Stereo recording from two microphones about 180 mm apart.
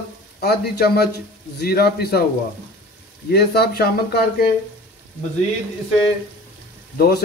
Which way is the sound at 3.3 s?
60° left (ahead or behind).